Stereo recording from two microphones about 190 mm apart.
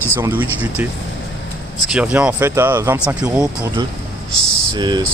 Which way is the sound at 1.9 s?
5° right (ahead or behind).